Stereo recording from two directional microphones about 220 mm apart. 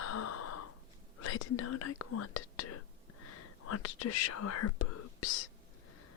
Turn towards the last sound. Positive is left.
turn(degrees=80)